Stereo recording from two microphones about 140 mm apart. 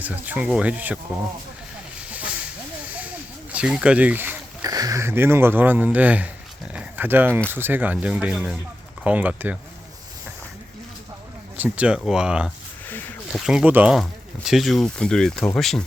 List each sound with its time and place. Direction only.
0.0 s speech: 10° right (ahead or behind)
2.0 s snake: 10° right (ahead or behind)
2.9 s a sound: 10° right (ahead or behind)
4.6 s speech: 25° right (ahead or behind); by 6.3 s 10° right (ahead or behind)
6.7 s dog: 15° right (ahead or behind)
7.5 s speech: 15° right (ahead or behind)
11.5 s speech: 10° right (ahead or behind)
12.9 s a sound: 15° left (ahead or behind)
13.3 s speech: 5° right (ahead or behind)